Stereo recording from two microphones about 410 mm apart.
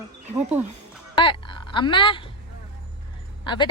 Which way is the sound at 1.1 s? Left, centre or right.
Centre.